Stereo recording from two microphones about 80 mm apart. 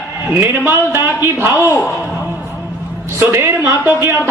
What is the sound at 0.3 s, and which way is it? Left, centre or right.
A man's voice, right.